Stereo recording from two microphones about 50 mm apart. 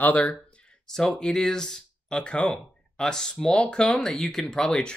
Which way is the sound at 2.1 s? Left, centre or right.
Left.